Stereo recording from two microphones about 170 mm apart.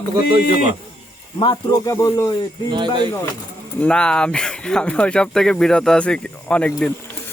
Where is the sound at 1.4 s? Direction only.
25° left (ahead or behind).